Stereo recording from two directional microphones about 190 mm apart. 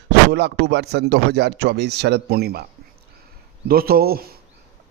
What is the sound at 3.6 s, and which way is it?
Speech, 50° right (ahead or behind).